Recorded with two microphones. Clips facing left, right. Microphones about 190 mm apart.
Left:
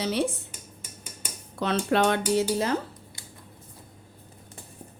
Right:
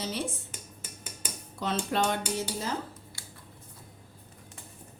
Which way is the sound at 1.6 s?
65° left (ahead or behind).